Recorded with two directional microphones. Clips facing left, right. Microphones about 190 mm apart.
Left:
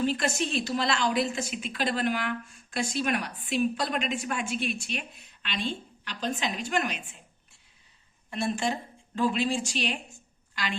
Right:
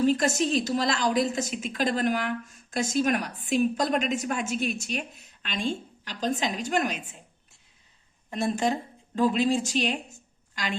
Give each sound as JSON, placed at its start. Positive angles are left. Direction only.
{"t": 0.0, "sound": "a woman's voice", "side_deg": -40}
{"t": 8.3, "sound": "a woman's voice", "side_deg": -40}